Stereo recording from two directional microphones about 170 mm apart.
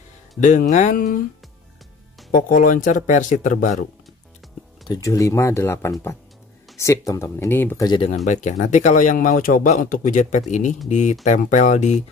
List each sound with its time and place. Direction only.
0.4 s speech: 45° left (ahead or behind)
2.3 s speech: 50° left (ahead or behind)
4.8 s speech: 20° left (ahead or behind)
7.8 s speech: 30° left (ahead or behind)
8.3 s speech: 45° left (ahead or behind)